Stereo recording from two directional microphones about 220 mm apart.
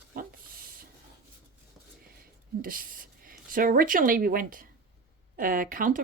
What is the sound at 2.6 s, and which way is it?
Speech, 40° right (ahead or behind).